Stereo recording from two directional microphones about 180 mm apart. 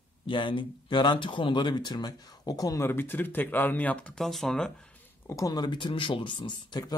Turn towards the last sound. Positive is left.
turn(degrees=25)  # may be behind; listen again after turning